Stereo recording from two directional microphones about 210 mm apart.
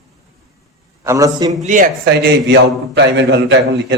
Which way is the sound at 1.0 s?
15° right (ahead or behind).